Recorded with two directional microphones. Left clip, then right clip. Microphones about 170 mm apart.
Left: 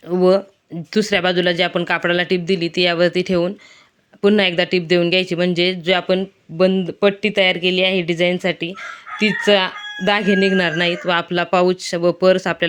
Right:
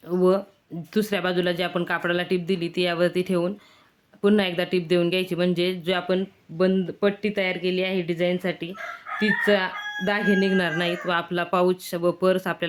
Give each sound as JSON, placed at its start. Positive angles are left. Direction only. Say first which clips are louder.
{"t": 0.1, "sound": "speech", "louder": "left 6 dB", "side_deg": 30}